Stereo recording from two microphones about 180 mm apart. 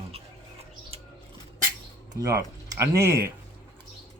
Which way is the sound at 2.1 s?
20° right (ahead or behind).